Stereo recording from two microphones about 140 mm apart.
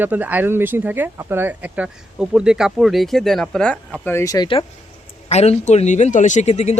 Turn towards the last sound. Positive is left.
turn(degrees=50)  # may be behind; listen again after turning